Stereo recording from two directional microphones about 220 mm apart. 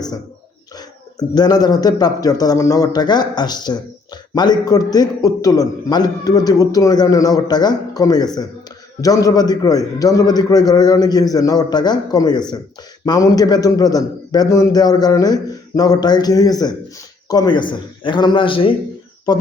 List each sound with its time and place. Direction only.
1.4 s a man's voice: 20° left (ahead or behind)